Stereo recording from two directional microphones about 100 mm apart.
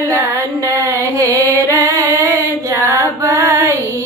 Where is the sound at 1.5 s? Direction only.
25° left (ahead or behind).